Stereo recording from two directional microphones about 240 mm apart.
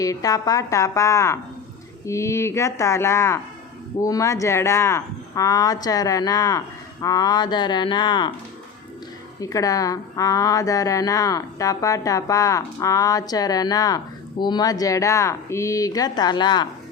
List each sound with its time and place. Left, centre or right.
0.0 s speech: centre
9.4 s speech: centre